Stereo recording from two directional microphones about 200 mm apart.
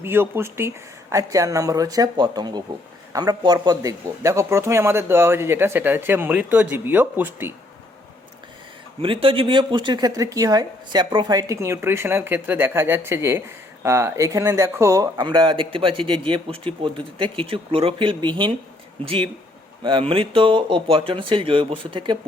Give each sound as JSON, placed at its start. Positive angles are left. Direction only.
{"t": 0.0, "sound": "a man's voice", "side_deg": -10}
{"t": 9.0, "sound": "speech", "side_deg": -25}